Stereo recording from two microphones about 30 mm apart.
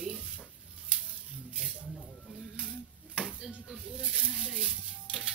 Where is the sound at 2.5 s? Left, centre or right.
Right.